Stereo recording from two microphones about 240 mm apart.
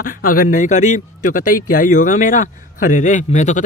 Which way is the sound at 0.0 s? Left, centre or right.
Left.